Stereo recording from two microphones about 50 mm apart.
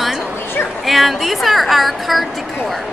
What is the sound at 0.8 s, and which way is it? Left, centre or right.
A woman's voice, centre.